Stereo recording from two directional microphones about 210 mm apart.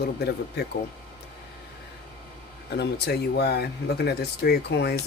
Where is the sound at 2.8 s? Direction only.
50° left (ahead or behind).